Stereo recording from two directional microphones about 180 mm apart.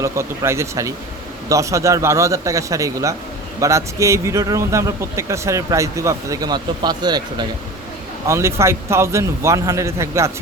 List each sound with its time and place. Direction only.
0.0 s speech: 15° right (ahead or behind)